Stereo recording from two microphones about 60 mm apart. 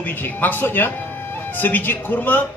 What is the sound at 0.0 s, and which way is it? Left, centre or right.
A man's voice, left.